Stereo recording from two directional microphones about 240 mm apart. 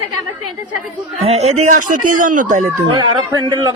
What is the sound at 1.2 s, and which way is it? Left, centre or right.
A man's voice, right.